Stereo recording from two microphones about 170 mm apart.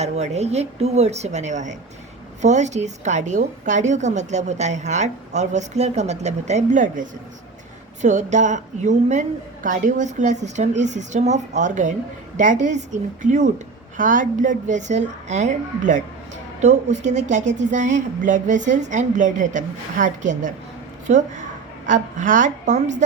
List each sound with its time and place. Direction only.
0.0 s a woman's voice: 40° right (ahead or behind)